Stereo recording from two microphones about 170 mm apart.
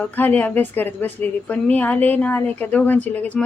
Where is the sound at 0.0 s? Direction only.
10° left (ahead or behind).